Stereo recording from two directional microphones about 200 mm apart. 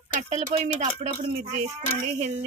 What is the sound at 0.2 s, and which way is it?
Speech, 35° right (ahead or behind).